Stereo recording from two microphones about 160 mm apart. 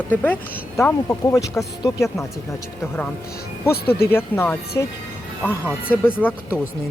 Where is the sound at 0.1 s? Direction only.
10° left (ahead or behind).